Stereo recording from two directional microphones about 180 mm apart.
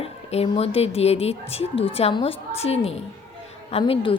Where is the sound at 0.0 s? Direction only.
35° left (ahead or behind).